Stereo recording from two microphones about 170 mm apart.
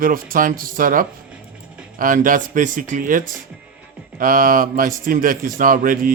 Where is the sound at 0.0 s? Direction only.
55° right (ahead or behind).